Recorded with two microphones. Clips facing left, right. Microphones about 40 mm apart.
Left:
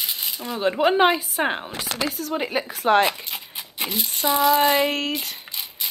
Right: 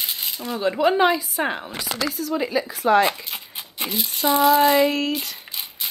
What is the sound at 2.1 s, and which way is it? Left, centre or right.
Speech, left.